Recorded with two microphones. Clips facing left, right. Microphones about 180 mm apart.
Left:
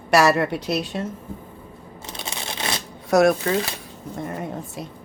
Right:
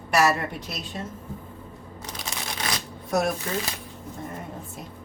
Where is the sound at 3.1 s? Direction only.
85° left.